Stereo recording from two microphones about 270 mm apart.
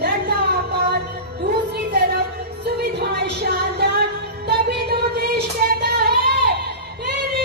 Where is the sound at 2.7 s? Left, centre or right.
Right.